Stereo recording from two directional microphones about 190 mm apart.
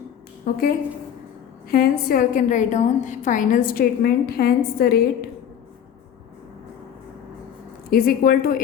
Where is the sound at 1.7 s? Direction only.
50° left (ahead or behind).